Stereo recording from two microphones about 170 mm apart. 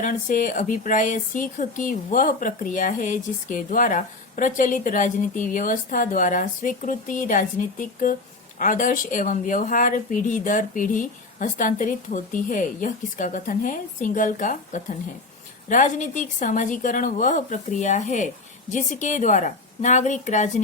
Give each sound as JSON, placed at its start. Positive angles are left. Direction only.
{"t": 0.0, "sound": "speech", "side_deg": 50}